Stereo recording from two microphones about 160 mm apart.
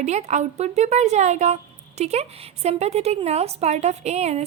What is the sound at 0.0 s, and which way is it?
A woman's voice, 45° right (ahead or behind).